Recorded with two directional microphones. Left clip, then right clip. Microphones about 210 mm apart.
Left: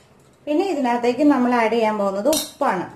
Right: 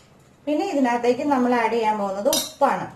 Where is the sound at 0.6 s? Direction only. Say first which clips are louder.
Left 2 dB; 40° left (ahead or behind).